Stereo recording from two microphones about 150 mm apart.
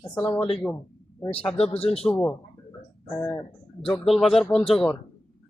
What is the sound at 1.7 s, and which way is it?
Speech, 40° left (ahead or behind).